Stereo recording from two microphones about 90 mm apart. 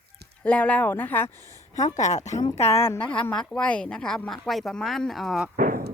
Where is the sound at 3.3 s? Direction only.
10° left (ahead or behind).